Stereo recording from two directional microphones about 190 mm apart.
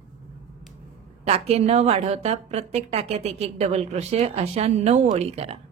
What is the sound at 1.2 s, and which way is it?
A woman's voice, 35° right (ahead or behind).